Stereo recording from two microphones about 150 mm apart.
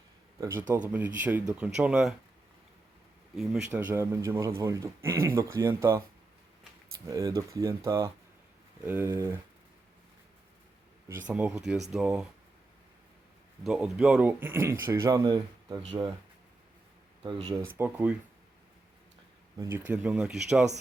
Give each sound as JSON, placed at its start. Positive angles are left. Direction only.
{"t": 0.3, "sound": "a man's voice", "side_deg": -15}
{"t": 3.3, "sound": "speech", "side_deg": 0}
{"t": 3.7, "sound": "a man's voice", "side_deg": -10}
{"t": 7.1, "sound": "a man's voice", "side_deg": -20}
{"t": 11.3, "sound": "a man's voice", "side_deg": -10}
{"t": 13.7, "sound": "a man's voice", "side_deg": -5}
{"t": 17.2, "sound": "speech", "side_deg": -30}
{"t": 17.7, "sound": "a man's voice", "side_deg": -10}
{"t": 19.5, "sound": "a man's voice", "side_deg": -20}